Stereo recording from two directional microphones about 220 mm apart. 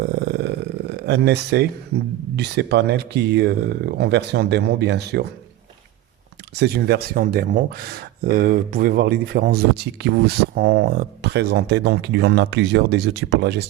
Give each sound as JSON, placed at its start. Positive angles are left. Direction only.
{"t": 0.0, "sound": "a sound", "side_deg": -50}
{"t": 2.3, "sound": "speech", "side_deg": -50}
{"t": 6.6, "sound": "speech", "side_deg": -45}